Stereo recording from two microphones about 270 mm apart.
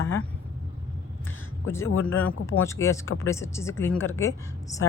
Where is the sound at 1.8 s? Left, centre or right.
Left.